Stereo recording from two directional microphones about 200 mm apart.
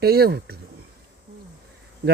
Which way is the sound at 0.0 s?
50° right (ahead or behind).